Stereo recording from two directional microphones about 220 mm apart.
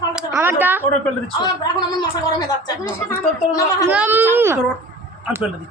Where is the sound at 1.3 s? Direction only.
20° left (ahead or behind).